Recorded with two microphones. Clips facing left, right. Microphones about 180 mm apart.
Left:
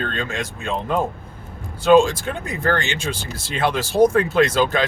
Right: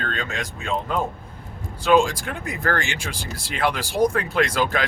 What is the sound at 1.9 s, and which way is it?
Speech, 25° left (ahead or behind).